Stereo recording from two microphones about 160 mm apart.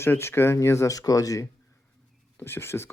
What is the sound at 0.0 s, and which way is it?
Speech, 15° left (ahead or behind).